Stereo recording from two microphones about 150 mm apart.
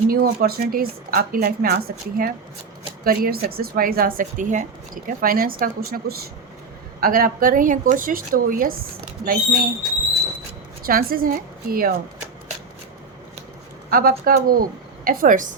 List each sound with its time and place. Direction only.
0.1 s a woman's voice: 90° right; by 4.6 s 60° right (ahead or behind)
5.0 s a woman's voice: 75° right (ahead or behind)
10.8 s a woman's voice: 75° right (ahead or behind)
13.9 s a woman's voice: 75° right (ahead or behind)